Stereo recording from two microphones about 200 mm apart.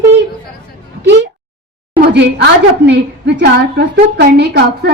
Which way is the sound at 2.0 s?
55° right (ahead or behind).